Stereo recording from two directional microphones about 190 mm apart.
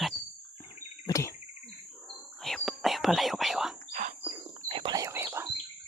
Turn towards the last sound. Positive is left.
turn(degrees=-15)  # may be behind; listen again after turning